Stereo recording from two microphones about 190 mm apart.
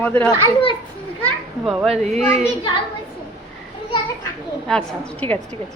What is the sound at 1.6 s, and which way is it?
Speech, centre (ahead or behind).